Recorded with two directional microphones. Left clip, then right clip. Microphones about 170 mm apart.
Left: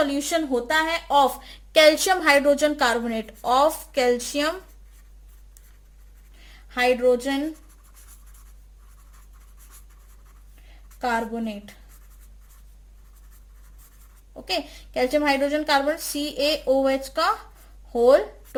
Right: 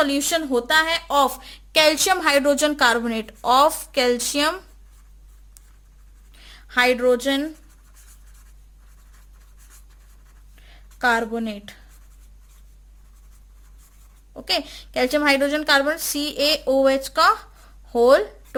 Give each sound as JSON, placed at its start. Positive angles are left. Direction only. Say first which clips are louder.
{"t": 0.0, "sound": "a woman's voice", "louder": "right 2 dB", "side_deg": -55}
{"t": 6.4, "sound": "a sound", "louder": "right 3 dB", "side_deg": -50}
{"t": 7.1, "sound": "speech", "louder": "right 2 dB", "side_deg": -55}
{"t": 11.0, "sound": "a woman's voice", "louder": "right 5 dB", "side_deg": -50}
{"t": 14.4, "sound": "a woman's voice", "louder": "right 4 dB", "side_deg": -50}